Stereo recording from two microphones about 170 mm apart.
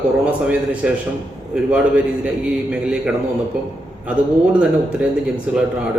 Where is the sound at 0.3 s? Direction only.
10° right (ahead or behind).